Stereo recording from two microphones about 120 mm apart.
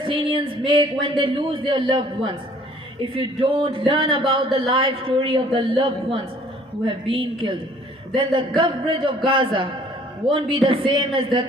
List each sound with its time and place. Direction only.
0.0 s speech: 45° right (ahead or behind)